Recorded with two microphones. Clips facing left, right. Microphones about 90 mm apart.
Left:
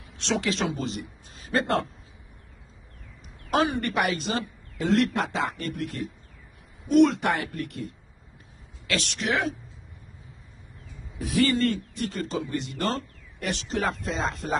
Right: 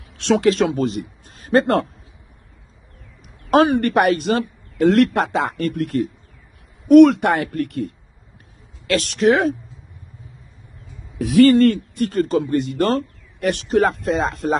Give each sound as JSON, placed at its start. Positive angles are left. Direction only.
{"t": 0.2, "sound": "speech", "side_deg": -50}
{"t": 3.4, "sound": "a woman's voice", "side_deg": -60}
{"t": 11.1, "sound": "speech", "side_deg": -70}